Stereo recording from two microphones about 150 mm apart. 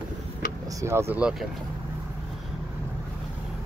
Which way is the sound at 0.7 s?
20° right (ahead or behind).